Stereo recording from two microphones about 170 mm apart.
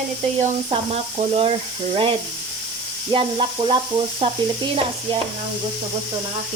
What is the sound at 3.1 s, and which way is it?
Speech, 30° right (ahead or behind).